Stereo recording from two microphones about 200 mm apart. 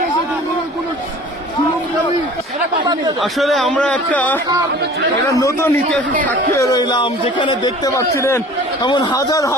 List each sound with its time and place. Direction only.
3.2 s a man's voice: centre (ahead or behind); by 9.6 s 15° left (ahead or behind)